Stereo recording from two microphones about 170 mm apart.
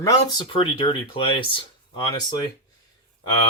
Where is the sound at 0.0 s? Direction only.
20° left (ahead or behind).